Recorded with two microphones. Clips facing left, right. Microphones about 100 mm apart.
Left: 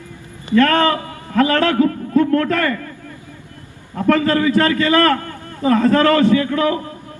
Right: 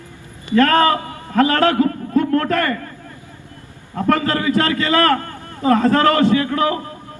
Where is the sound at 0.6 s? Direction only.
30° right (ahead or behind).